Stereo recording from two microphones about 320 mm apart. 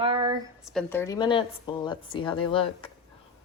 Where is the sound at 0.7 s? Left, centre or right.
Centre.